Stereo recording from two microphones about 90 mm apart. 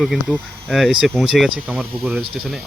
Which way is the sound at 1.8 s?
20° right (ahead or behind).